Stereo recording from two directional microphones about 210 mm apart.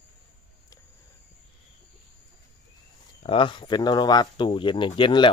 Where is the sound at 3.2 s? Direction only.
25° left (ahead or behind).